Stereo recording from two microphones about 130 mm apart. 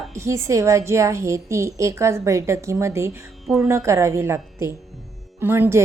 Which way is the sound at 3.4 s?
Centre (ahead or behind).